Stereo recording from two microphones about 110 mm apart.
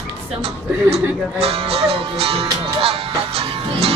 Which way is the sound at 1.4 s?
65° right (ahead or behind).